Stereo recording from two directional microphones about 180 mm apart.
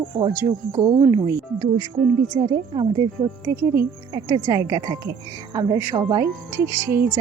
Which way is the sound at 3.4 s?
15° right (ahead or behind).